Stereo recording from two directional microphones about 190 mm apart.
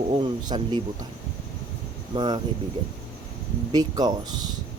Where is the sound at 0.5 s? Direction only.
25° right (ahead or behind).